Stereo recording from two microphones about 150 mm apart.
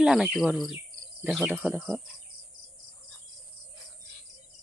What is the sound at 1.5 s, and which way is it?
Speech, 15° right (ahead or behind).